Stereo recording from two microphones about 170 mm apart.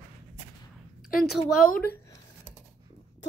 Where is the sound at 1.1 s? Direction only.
55° left (ahead or behind).